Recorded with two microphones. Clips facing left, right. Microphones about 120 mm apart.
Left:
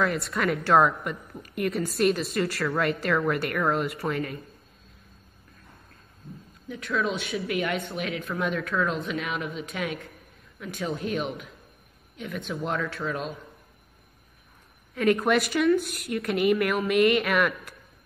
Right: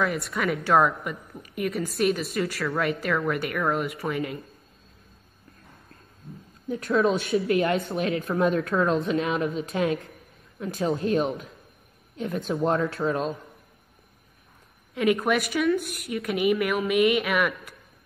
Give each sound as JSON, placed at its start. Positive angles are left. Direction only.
{"t": 0.0, "sound": "a woman's voice", "side_deg": 0}
{"t": 6.9, "sound": "speech", "side_deg": -30}
{"t": 15.1, "sound": "a woman's voice", "side_deg": 0}